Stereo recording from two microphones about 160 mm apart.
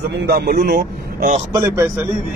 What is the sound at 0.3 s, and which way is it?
Speech, 85° right.